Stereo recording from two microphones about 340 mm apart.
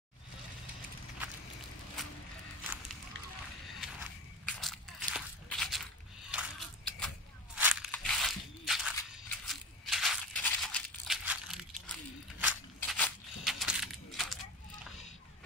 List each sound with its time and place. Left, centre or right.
2.0 s a sound: centre
3.8 s biting: centre
7.6 s crunch: centre